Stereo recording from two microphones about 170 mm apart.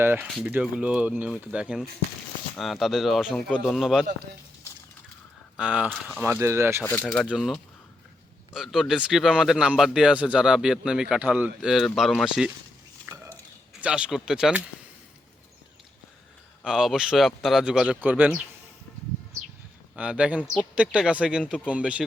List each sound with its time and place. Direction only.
0.0 s speech: 10° right (ahead or behind)
5.5 s speech: 5° right (ahead or behind)
6.8 s speech: 10° left (ahead or behind)
7.3 s speech: 5° right (ahead or behind)
8.5 s speech: centre (ahead or behind)
13.8 s speech: 5° right (ahead or behind)
16.6 s speech: 5° right (ahead or behind)
20.0 s speech: 5° right (ahead or behind)